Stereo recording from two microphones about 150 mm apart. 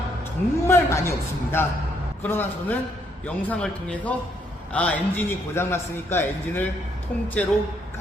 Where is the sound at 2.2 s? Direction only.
10° left (ahead or behind).